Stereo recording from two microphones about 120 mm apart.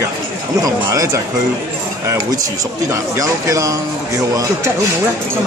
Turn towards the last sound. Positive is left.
turn(degrees=-30)  # may be behind; listen again after turning